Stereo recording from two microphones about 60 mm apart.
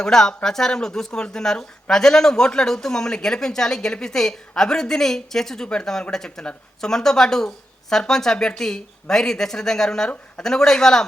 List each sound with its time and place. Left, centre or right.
0.0 s speech: centre